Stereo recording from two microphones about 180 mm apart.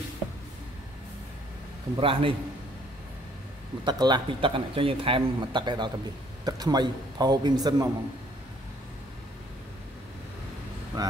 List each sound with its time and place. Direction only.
2.0 s speech: 30° right (ahead or behind)
3.8 s speech: 25° right (ahead or behind)
11.0 s speech: 20° right (ahead or behind)